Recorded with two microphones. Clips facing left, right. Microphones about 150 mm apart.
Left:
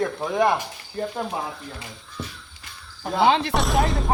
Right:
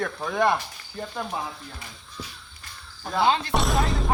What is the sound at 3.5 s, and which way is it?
Speech, centre (ahead or behind).